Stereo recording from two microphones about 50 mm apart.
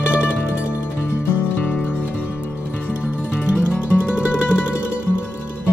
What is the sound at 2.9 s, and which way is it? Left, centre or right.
Music, right.